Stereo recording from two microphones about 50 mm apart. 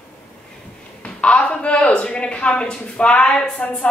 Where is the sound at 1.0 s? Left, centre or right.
Left.